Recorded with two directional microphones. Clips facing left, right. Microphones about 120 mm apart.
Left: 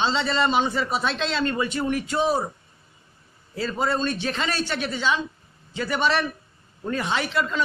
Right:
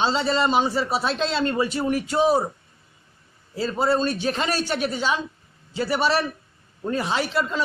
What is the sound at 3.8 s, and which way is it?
Speech, 35° right (ahead or behind).